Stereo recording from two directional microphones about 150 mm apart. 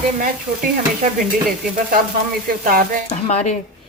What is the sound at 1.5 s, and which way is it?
Stir, 75° right (ahead or behind).